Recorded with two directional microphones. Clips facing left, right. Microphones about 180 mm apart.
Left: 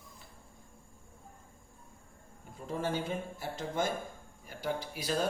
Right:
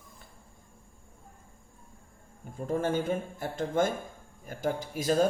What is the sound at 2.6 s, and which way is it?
Speech, 50° right (ahead or behind).